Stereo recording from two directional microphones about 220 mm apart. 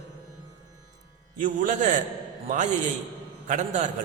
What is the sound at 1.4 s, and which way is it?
A man's voice, 35° right (ahead or behind).